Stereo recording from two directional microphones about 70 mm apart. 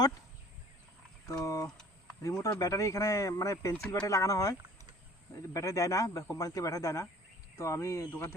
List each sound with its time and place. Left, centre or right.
1.5 s speech: left
8.1 s a man's voice: left